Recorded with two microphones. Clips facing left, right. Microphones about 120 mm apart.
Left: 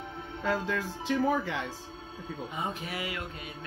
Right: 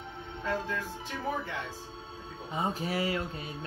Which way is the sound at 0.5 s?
85° left.